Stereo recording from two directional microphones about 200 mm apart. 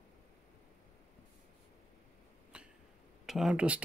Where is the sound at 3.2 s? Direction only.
Centre (ahead or behind).